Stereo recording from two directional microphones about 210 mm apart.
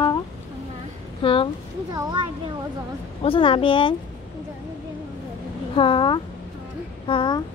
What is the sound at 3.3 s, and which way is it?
Speech, 25° left (ahead or behind).